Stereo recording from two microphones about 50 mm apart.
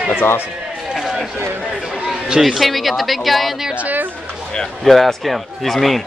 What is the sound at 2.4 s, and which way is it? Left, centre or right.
Speech, centre.